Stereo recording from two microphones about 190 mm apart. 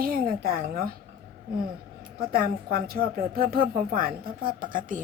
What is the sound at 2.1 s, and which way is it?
A woman's voice, 50° right (ahead or behind).